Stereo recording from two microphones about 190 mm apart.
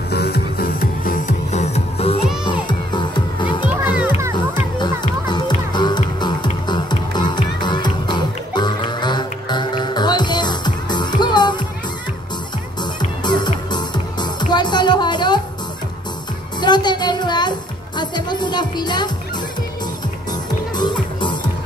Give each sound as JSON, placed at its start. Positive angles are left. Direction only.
{"t": 0.1, "sound": "music", "side_deg": 55}
{"t": 3.8, "sound": "children playing", "side_deg": -5}
{"t": 4.7, "sound": "music", "side_deg": 25}
{"t": 13.2, "sound": "music", "side_deg": 25}
{"t": 16.6, "sound": "music", "side_deg": 25}
{"t": 20.7, "sound": "music", "side_deg": 25}